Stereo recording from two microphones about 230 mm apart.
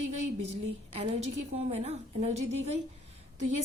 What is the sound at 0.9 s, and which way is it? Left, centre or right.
A woman's voice, right.